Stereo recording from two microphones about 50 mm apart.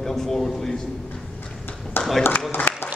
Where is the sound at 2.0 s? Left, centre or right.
Left.